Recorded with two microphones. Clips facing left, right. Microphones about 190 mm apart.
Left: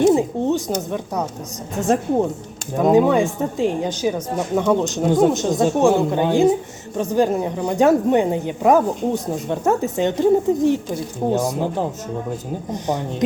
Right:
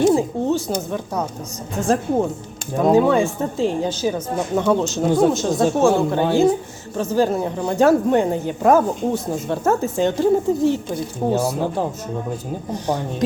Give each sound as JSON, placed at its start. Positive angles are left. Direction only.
{"t": 0.4, "sound": "speech", "side_deg": 20}
{"t": 1.7, "sound": "speech", "side_deg": 20}
{"t": 10.8, "sound": "speech", "side_deg": 0}
{"t": 11.3, "sound": "speech", "side_deg": 15}
{"t": 12.7, "sound": "speech", "side_deg": 20}